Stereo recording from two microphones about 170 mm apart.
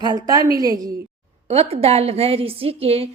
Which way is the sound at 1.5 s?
35° right (ahead or behind).